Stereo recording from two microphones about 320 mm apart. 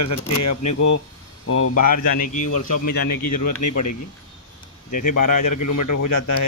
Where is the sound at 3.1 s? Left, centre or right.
Left.